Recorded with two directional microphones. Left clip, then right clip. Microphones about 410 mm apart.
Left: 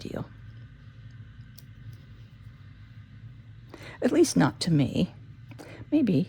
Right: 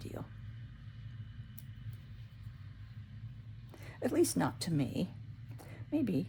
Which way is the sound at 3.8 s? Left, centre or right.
Left.